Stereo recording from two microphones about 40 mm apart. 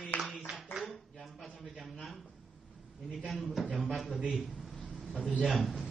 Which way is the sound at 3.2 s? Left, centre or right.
Centre.